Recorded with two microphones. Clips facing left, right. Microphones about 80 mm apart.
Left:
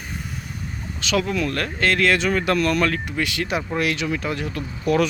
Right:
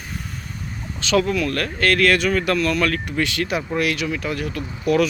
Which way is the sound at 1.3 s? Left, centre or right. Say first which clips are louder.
Right 1 dB; left.